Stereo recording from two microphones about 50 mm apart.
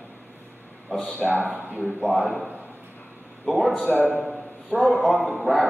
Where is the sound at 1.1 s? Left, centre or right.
Left.